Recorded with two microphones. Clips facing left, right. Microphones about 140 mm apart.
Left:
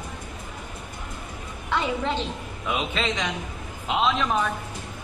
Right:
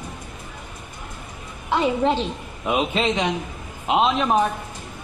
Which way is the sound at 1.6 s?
35° right (ahead or behind).